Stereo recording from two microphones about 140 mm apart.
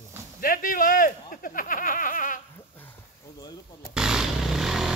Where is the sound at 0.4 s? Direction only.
85° left.